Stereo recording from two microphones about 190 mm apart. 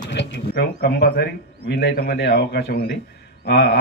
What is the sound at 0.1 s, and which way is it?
A man's voice, 65° left (ahead or behind).